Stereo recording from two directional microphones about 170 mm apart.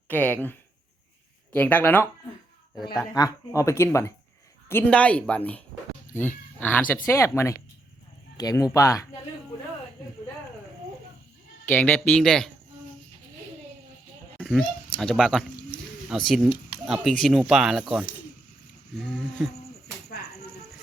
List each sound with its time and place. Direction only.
0.1 s speech: 10° left (ahead or behind)
1.5 s speech: 10° left (ahead or behind)
2.9 s speech: 20° left (ahead or behind)
11.7 s speech: 10° left (ahead or behind)
14.3 s a sound: 5° left (ahead or behind)
14.9 s speech: centre (ahead or behind)